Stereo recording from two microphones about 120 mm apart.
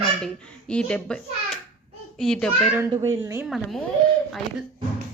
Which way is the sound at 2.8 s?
20° right (ahead or behind).